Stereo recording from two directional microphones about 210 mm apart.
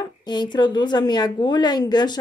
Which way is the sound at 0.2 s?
20° left (ahead or behind).